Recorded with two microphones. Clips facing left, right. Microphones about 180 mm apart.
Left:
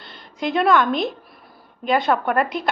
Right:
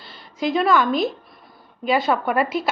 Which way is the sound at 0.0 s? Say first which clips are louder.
Right 2 dB; centre (ahead or behind).